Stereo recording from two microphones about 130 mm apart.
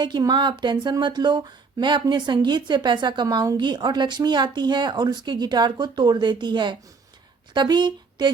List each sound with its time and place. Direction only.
0.0 s speech: 35° right (ahead or behind)